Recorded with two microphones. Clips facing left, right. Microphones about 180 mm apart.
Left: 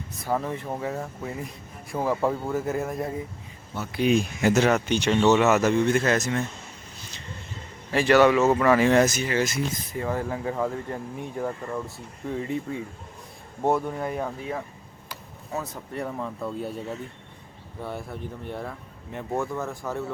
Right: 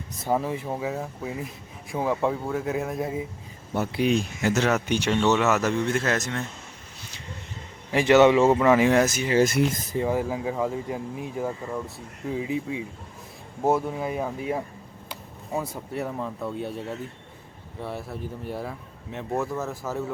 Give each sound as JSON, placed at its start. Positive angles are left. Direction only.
{"t": 0.3, "sound": "speech", "side_deg": -10}
{"t": 4.0, "sound": "speech", "side_deg": 10}
{"t": 4.7, "sound": "speech", "side_deg": -10}
{"t": 5.1, "sound": "speech", "side_deg": 5}
{"t": 7.9, "sound": "speech", "side_deg": -20}
{"t": 9.4, "sound": "speech", "side_deg": -60}
{"t": 10.0, "sound": "speech", "side_deg": -10}